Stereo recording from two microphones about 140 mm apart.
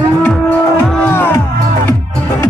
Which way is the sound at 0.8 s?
10° left (ahead or behind).